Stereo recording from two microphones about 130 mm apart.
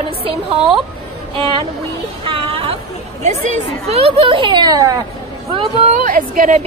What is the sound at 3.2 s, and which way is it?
A woman's voice, 65° right (ahead or behind).